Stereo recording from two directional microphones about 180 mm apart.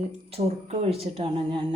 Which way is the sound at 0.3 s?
35° right (ahead or behind).